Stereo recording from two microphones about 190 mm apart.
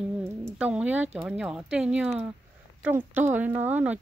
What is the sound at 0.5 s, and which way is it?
Speech, 5° right (ahead or behind).